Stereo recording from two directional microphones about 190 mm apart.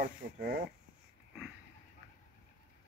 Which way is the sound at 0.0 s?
45° right (ahead or behind).